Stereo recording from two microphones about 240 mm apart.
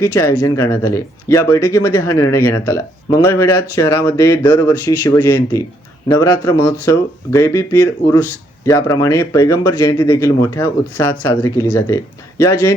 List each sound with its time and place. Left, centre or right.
0.0 s speech: centre